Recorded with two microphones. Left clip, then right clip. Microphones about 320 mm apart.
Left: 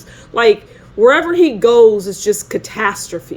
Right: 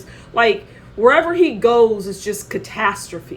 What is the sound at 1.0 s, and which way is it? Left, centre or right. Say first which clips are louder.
A woman's voice: left 3 dB; left.